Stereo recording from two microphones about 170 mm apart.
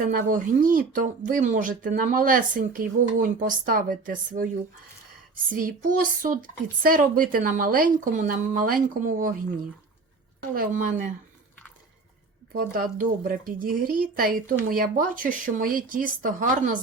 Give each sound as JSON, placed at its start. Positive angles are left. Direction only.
{"t": 0.0, "sound": "speech", "side_deg": -55}
{"t": 10.5, "sound": "speech", "side_deg": -55}
{"t": 12.5, "sound": "speech", "side_deg": -55}